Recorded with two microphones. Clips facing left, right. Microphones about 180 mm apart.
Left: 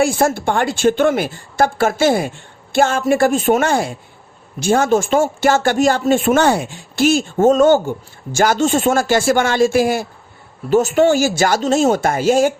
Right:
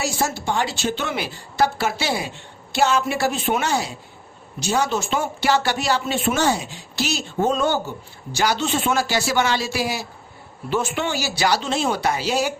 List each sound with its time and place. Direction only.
0.0 s speech: 55° left (ahead or behind)